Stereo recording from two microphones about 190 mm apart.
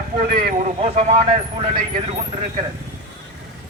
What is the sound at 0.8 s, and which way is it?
Speech, 35° right (ahead or behind).